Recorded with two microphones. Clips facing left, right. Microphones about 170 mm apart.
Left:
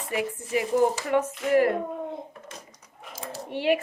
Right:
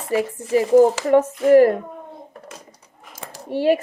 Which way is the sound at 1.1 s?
45° right (ahead or behind).